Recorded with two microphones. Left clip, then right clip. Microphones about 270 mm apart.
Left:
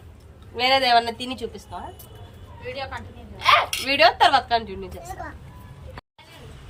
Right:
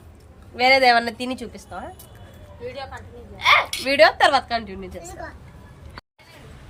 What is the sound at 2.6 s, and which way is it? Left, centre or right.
Speech, right.